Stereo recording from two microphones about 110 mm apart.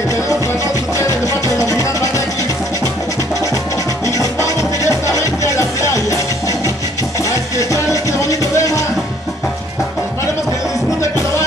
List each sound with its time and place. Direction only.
0.9 s music: 30° left (ahead or behind)
4.0 s music: 30° left (ahead or behind)
7.2 s music: 30° left (ahead or behind)